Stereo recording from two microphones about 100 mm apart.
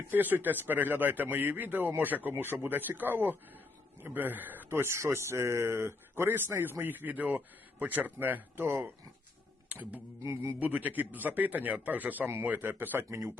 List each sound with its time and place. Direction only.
0.1 s speech: 20° right (ahead or behind)